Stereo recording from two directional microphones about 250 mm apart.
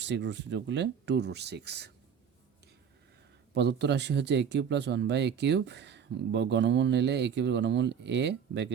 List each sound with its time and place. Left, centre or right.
0.0 s speech: right
3.5 s speech: right